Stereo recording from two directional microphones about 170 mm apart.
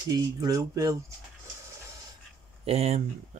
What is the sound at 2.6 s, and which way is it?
Speech, 35° right (ahead or behind).